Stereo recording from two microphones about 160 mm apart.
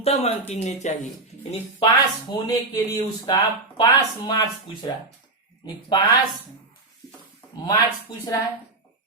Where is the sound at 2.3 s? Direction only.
25° left (ahead or behind).